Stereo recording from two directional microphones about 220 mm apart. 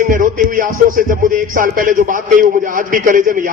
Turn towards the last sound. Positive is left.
turn(degrees=-35)  # may be behind; listen again after turning